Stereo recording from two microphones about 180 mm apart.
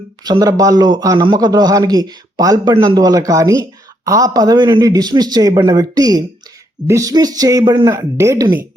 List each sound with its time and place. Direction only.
0.3 s speech: 20° right (ahead or behind)